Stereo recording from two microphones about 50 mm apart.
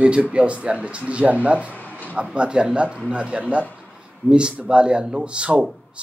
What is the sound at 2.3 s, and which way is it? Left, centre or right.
Speech, right.